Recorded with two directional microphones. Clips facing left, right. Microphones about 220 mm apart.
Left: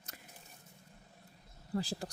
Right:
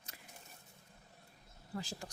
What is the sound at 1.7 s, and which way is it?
Speech, 35° left (ahead or behind).